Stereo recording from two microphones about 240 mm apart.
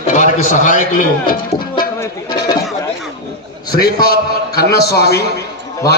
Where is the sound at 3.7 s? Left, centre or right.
Left.